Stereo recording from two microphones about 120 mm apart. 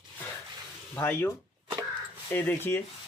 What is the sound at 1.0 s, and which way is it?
Speech, 15° left (ahead or behind).